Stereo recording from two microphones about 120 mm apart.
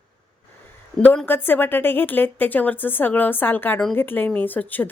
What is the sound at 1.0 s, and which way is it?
Speech, 15° left (ahead or behind).